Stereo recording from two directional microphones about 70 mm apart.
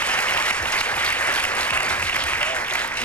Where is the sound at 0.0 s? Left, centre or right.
Centre.